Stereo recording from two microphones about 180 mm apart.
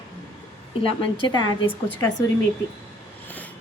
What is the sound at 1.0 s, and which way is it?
Speech, 25° left (ahead or behind).